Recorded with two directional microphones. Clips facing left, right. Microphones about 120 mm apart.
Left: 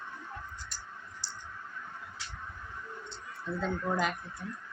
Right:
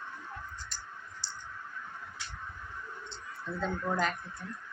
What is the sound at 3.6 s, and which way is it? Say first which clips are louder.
Speech: even; 5° left (ahead or behind).